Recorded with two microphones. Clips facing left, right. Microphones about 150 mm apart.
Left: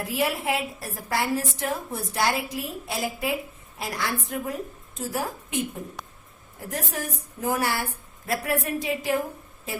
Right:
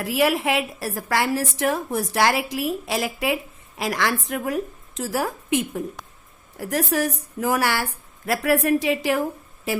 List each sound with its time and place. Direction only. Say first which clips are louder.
0.0 s a woman's voice: right 5 dB; 90° right